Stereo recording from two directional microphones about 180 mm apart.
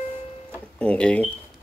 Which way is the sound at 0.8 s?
5° left (ahead or behind).